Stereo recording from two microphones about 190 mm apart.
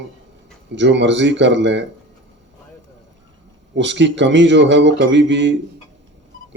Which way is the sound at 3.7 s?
70° right (ahead or behind).